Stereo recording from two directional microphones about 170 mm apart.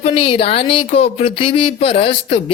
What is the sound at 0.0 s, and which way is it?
Speech, 30° left (ahead or behind).